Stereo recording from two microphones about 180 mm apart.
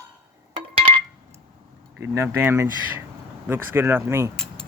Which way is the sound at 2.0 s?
15° right (ahead or behind).